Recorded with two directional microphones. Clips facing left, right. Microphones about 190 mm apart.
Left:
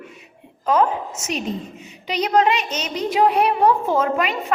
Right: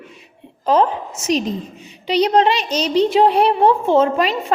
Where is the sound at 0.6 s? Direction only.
30° right (ahead or behind).